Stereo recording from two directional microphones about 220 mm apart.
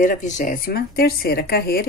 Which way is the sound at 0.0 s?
35° left (ahead or behind).